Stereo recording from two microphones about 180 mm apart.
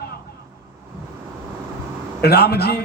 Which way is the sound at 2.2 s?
60° left (ahead or behind).